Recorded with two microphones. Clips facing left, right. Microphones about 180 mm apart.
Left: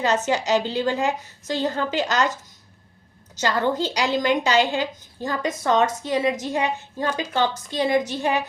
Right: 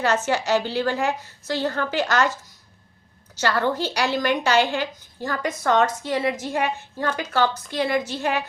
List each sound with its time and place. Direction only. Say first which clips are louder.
0.3 s a woman's voice: left 1 dB; 15° left (ahead or behind)
3.4 s a woman's voice: even; 20° left (ahead or behind)